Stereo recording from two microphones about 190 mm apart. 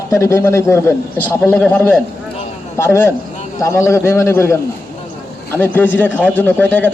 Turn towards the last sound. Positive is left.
turn(degrees=10)  # may be behind; listen again after turning